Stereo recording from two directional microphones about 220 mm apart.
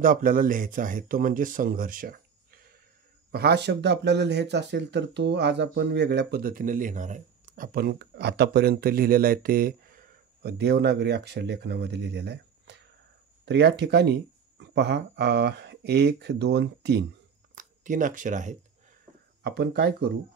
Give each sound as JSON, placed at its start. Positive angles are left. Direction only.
{"t": 0.0, "sound": "speech", "side_deg": -40}
{"t": 17.6, "sound": "speech", "side_deg": -35}
{"t": 19.4, "sound": "speech", "side_deg": -50}